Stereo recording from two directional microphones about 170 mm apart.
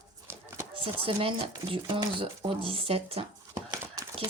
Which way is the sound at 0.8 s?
30° right (ahead or behind).